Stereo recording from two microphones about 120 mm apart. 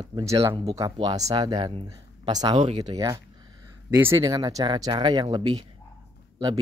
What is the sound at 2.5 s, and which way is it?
Speech, 55° right (ahead or behind).